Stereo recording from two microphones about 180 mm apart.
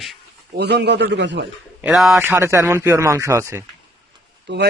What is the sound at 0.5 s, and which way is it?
Speech, 65° right (ahead or behind).